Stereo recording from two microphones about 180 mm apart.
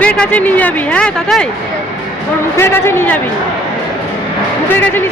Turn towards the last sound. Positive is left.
turn(degrees=10)  # may be behind; listen again after turning